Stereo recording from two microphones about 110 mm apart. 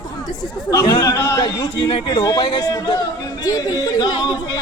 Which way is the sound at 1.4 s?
45° left (ahead or behind).